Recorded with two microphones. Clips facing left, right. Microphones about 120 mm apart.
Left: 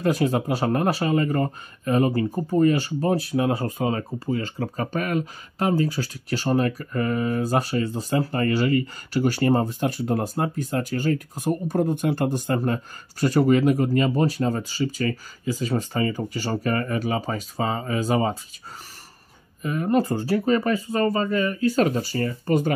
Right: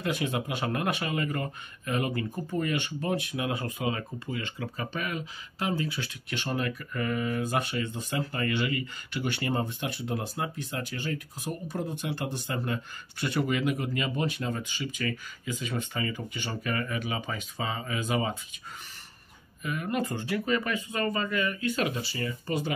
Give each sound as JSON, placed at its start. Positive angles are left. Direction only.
{"t": 0.0, "sound": "speech", "side_deg": 40}
{"t": 19.6, "sound": "speech", "side_deg": 35}